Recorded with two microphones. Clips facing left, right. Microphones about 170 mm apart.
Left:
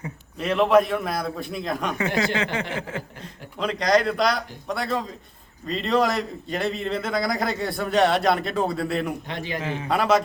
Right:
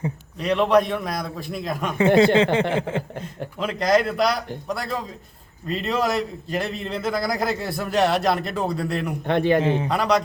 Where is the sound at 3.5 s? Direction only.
5° right (ahead or behind).